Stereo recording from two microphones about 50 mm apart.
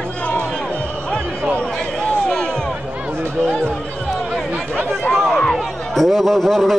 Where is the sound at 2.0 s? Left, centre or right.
Centre.